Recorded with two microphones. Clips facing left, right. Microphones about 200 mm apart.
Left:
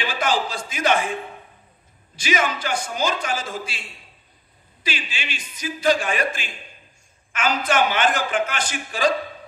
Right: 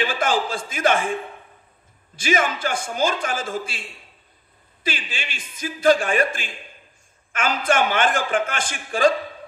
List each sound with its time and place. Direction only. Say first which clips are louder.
0.0 s a man's voice: right 1 dB; 50° right (ahead or behind)
2.1 s a man's voice: right 1 dB; 50° right (ahead or behind)
4.8 s a man's voice: right 1 dB; 50° right (ahead or behind)